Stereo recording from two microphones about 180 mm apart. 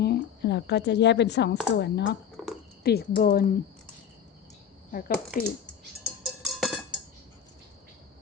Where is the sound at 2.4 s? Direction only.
Centre (ahead or behind).